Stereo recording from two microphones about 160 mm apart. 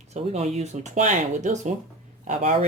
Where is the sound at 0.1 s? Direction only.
45° right (ahead or behind).